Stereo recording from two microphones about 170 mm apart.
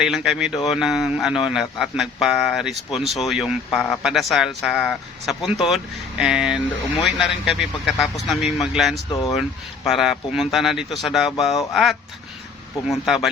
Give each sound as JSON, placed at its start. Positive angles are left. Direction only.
{"t": 0.0, "sound": "a man's voice", "side_deg": 0}
{"t": 9.0, "sound": "speech", "side_deg": 20}
{"t": 9.3, "sound": "a man's voice", "side_deg": 0}